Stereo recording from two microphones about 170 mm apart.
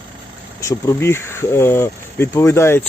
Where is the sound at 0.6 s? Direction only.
20° left (ahead or behind).